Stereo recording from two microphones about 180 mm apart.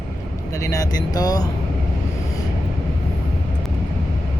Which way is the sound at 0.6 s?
20° left (ahead or behind).